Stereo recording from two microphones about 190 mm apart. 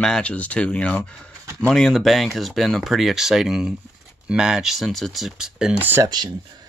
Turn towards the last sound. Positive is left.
turn(degrees=-20)  # may be behind; listen again after turning